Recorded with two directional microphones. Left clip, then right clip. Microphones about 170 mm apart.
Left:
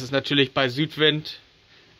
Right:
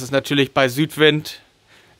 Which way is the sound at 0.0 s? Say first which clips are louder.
Right 3 dB; 30° right (ahead or behind).